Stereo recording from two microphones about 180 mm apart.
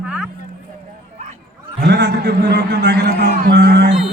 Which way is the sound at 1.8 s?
70° right (ahead or behind).